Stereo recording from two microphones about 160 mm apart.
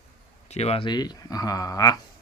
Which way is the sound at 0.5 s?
40° left (ahead or behind).